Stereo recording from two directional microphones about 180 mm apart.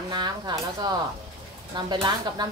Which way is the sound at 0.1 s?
25° right (ahead or behind).